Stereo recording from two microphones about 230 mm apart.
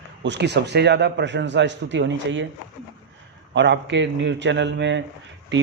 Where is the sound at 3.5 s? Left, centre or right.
Right.